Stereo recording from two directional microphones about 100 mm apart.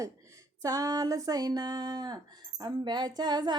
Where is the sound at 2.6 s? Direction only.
45° right (ahead or behind).